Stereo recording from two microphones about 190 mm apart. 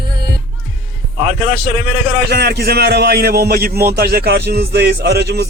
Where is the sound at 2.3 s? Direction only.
55° right (ahead or behind).